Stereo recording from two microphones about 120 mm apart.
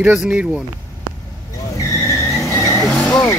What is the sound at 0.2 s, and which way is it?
Speech, 10° right (ahead or behind).